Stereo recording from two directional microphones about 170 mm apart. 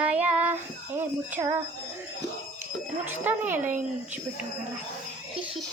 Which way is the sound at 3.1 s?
10° right (ahead or behind).